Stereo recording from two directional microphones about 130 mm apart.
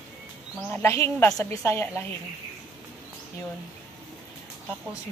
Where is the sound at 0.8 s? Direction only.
20° left (ahead or behind).